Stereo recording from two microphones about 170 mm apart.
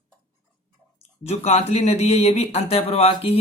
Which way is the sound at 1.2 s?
40° left (ahead or behind).